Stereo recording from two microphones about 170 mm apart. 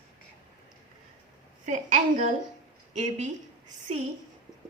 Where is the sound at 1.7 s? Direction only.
45° right (ahead or behind).